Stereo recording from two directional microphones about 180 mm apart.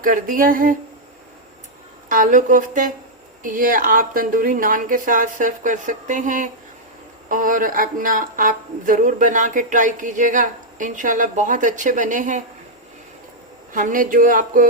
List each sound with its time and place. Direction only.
0.0 s speech: 50° right (ahead or behind)
2.0 s speech: 45° right (ahead or behind)
13.7 s speech: 50° right (ahead or behind)